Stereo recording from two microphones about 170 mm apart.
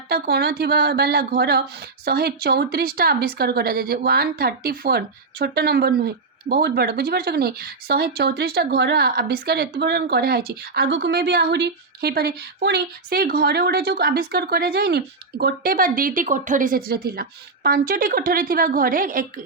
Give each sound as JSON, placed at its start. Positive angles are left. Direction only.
{"t": 0.1, "sound": "speech", "side_deg": -70}